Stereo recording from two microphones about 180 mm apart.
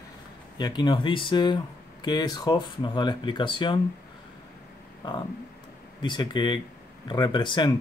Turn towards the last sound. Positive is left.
turn(degrees=25)  # may be behind; listen again after turning